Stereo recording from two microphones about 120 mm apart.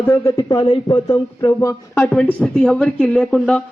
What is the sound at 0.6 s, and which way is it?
Speech, 40° left (ahead or behind).